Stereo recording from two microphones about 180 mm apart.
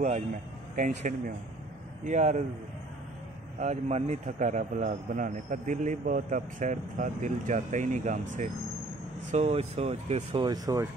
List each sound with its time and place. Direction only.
0.7 s a man's voice: 45° right (ahead or behind)
3.5 s a man's voice: 40° right (ahead or behind)
10.4 s speech: 20° right (ahead or behind)